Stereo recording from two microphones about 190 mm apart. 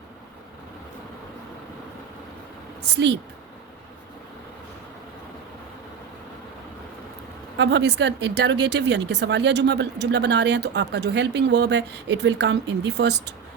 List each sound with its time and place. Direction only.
7.5 s speech: 65° right (ahead or behind)